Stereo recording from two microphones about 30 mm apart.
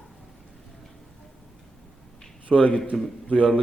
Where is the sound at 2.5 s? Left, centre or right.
Left.